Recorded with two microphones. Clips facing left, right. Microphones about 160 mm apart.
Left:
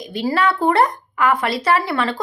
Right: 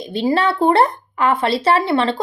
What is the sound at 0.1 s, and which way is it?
Speech, 25° right (ahead or behind).